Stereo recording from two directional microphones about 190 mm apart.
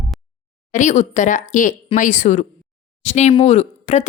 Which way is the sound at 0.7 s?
40° left (ahead or behind).